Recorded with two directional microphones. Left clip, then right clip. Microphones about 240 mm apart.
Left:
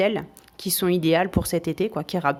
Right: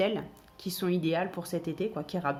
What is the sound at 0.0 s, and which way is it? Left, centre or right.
Speech, left.